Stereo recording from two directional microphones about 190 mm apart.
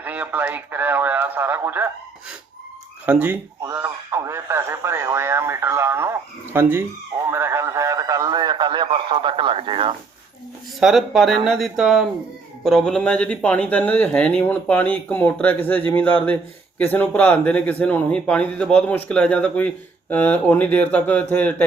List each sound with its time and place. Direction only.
0.0 s speech: 10° right (ahead or behind)
3.1 s speech: 10° right (ahead or behind)
7.3 s radio: 15° right (ahead or behind)
10.8 s speech: centre (ahead or behind)